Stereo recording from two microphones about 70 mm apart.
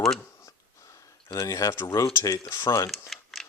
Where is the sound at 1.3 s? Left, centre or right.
Left.